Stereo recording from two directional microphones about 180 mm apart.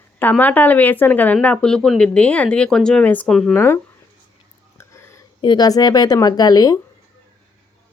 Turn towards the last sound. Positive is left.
turn(degrees=20)  # may be behind; listen again after turning